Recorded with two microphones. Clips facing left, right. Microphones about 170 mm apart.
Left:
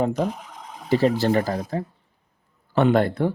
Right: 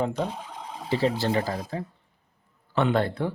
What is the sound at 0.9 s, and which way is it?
Speech, 45° left (ahead or behind).